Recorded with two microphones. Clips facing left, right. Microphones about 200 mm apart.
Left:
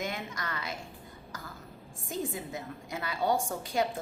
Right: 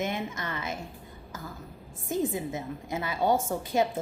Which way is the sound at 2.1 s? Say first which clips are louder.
Right 6 dB; 20° right (ahead or behind).